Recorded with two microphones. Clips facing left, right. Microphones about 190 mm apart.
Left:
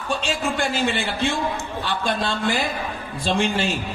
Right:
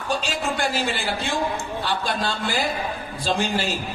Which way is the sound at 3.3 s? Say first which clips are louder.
Left 3 dB; 35° right (ahead or behind).